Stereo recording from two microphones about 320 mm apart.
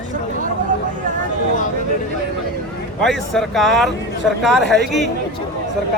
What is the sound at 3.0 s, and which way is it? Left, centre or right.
Speech, centre.